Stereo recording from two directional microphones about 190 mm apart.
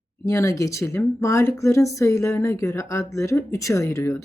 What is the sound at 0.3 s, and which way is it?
Speech, 15° left (ahead or behind).